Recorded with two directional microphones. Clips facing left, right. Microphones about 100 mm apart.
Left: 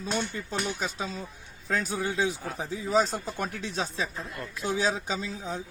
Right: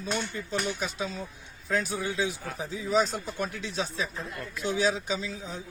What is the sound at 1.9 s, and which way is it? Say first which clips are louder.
Speech: left 2 dB; 50° left (ahead or behind).